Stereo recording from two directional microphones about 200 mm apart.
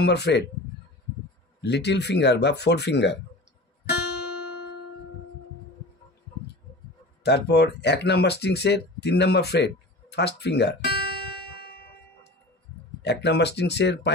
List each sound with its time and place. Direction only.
0.0 s speech: 55° left (ahead or behind)
1.6 s speech: 60° left (ahead or behind)
7.2 s speech: 55° left (ahead or behind)
13.0 s speech: 55° left (ahead or behind)